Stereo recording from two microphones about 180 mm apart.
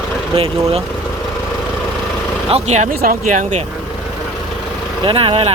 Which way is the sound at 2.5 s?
40° right (ahead or behind).